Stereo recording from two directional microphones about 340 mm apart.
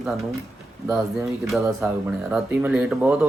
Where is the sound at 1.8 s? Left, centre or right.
Centre.